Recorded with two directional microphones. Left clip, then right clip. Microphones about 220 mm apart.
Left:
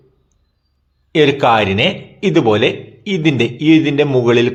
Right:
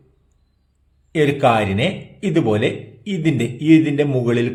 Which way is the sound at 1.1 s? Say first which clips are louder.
Left 4 dB; 5° right (ahead or behind).